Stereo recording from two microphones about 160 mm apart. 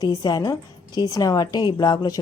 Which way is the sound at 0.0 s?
25° left (ahead or behind).